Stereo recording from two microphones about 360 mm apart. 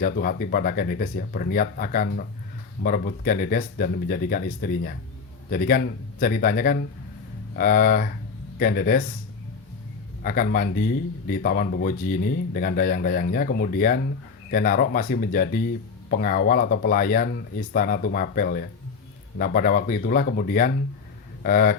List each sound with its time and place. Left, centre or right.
0.0 s speech: left
10.2 s speech: left